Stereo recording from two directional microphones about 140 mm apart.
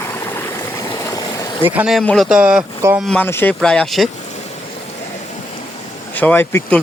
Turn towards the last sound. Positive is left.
turn(degrees=15)  # may be behind; listen again after turning